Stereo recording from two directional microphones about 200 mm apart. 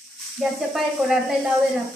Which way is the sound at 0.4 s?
Centre (ahead or behind).